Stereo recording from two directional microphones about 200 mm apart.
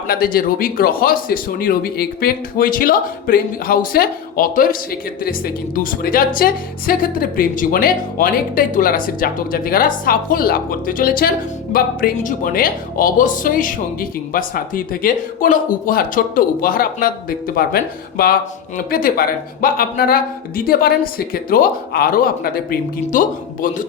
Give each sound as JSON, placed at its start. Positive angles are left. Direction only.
{"t": 0.1, "sound": "a man's voice", "side_deg": 45}